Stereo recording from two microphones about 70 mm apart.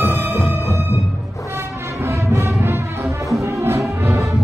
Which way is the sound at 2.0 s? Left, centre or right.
Right.